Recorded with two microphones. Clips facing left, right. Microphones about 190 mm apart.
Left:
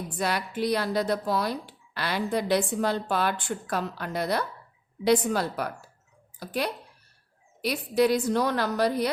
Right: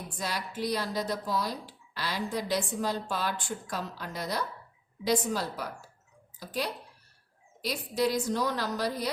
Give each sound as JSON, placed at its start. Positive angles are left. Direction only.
{"t": 0.2, "sound": "speech", "side_deg": 60}